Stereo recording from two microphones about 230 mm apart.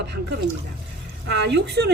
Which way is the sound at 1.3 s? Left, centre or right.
Right.